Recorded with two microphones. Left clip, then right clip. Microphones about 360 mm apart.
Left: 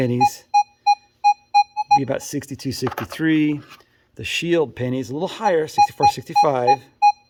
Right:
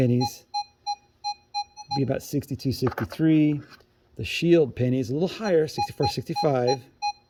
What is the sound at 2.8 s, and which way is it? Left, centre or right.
Speech, left.